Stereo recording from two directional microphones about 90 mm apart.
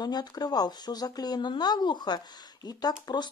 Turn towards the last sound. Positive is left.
turn(degrees=55)  # may be behind; listen again after turning